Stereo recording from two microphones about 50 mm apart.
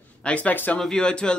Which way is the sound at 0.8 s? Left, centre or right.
Centre.